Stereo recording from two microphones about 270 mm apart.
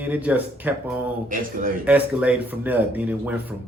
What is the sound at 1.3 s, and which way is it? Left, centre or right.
Speech, right.